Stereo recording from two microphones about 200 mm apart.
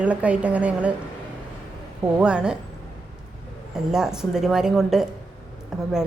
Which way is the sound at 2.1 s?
5° right (ahead or behind).